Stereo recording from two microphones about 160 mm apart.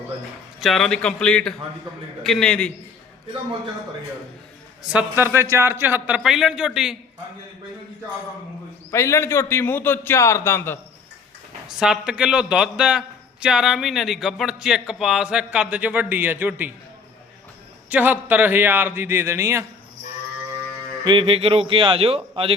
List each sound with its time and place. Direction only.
0.6 s a man's voice: centre (ahead or behind)
4.9 s a man's voice: 10° right (ahead or behind)
8.9 s a man's voice: 15° left (ahead or behind)
11.8 s a man's voice: 5° right (ahead or behind)
17.8 s a man's voice: 10° right (ahead or behind)
21.0 s speech: 30° right (ahead or behind)